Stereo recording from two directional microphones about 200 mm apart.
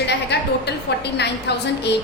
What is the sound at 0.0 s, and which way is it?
A woman's voice, 55° left (ahead or behind).